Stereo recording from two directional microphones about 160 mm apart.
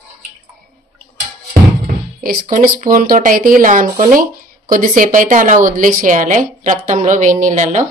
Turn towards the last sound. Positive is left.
turn(degrees=-50)  # may be behind; listen again after turning